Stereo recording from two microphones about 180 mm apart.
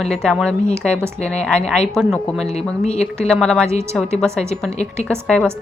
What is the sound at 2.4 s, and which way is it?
Speech, 35° left (ahead or behind).